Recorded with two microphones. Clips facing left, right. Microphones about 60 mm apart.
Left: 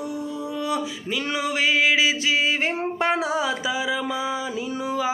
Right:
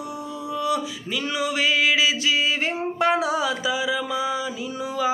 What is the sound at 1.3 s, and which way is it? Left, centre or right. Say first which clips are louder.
Mantra: even; left.